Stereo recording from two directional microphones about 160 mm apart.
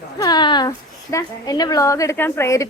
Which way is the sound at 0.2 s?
25° left (ahead or behind).